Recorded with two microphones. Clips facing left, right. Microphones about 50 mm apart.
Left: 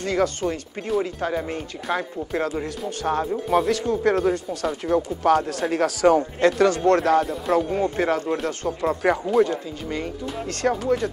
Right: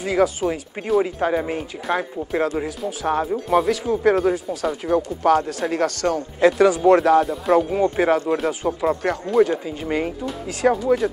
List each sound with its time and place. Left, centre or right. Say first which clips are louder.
0.0 s speech: right 3 dB; centre
9.0 s speech: left 2 dB; centre
9.5 s speech: right 4 dB; right
10.2 s speech: right 2 dB; centre